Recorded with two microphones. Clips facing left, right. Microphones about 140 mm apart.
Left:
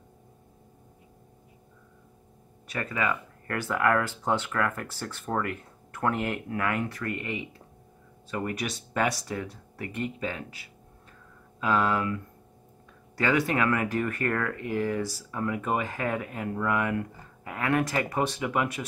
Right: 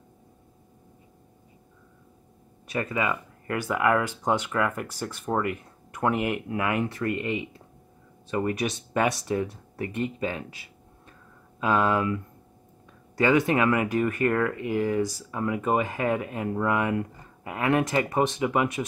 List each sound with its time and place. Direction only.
2.7 s speech: 20° right (ahead or behind)
11.6 s speech: 20° right (ahead or behind)
13.2 s speech: 20° right (ahead or behind)